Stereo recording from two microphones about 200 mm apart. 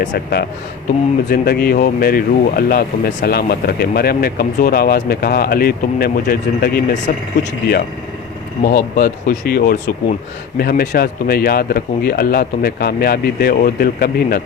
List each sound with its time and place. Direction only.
0.0 s speech: 45° left (ahead or behind)
8.6 s speech: 45° left (ahead or behind)